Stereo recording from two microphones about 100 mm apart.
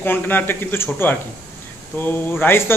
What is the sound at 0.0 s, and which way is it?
A man's voice, 20° left (ahead or behind).